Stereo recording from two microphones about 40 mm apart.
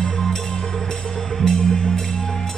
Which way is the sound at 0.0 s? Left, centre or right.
Centre.